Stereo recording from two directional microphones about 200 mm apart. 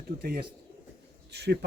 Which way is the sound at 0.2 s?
50° right (ahead or behind).